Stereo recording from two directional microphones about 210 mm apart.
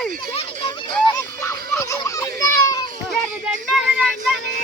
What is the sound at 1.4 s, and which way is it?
Fowl, 15° left (ahead or behind).